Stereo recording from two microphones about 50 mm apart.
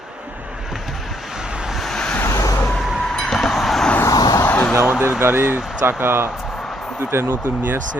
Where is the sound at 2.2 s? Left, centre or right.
Left.